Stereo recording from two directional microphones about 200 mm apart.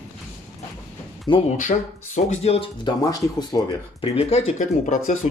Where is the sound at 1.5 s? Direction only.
40° left (ahead or behind).